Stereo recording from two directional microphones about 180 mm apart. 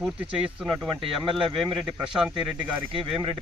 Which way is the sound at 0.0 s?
Centre (ahead or behind).